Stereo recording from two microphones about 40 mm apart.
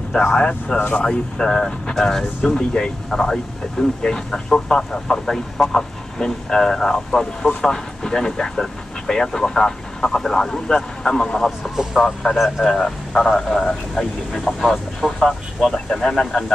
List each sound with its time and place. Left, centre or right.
0.4 s speech: left
5.2 s speech: centre
11.7 s speech: centre
12.0 s speech: centre